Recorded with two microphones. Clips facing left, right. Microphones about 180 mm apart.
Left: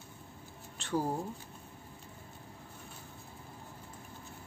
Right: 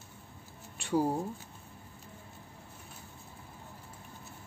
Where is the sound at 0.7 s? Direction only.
10° right (ahead or behind).